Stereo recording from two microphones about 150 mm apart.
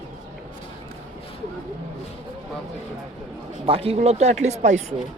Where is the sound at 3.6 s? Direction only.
40° right (ahead or behind).